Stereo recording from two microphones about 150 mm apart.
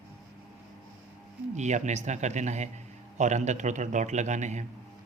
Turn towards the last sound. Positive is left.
turn(degrees=-50)  # may be behind; listen again after turning